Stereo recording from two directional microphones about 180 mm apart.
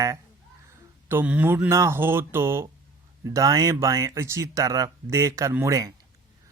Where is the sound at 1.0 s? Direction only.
10° right (ahead or behind).